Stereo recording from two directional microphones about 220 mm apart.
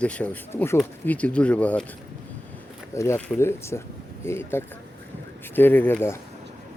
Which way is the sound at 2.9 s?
15° left (ahead or behind).